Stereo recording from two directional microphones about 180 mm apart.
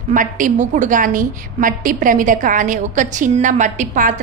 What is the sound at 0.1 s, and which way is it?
A woman's voice, 45° right (ahead or behind).